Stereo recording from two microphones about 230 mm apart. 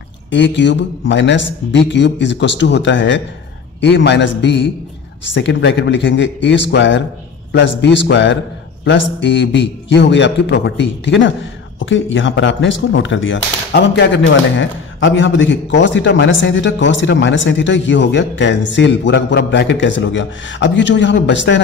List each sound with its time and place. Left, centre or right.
0.3 s speech: left